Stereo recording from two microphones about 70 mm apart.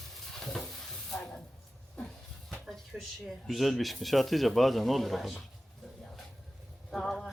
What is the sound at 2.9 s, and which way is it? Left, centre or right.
Speech, centre.